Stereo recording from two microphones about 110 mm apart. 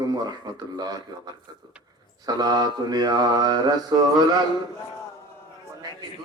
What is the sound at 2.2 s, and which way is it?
Mantra, 40° right (ahead or behind).